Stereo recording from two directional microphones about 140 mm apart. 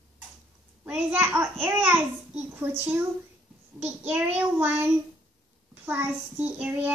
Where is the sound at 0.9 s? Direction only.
10° right (ahead or behind).